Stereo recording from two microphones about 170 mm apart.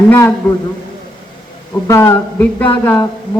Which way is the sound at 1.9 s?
15° left (ahead or behind).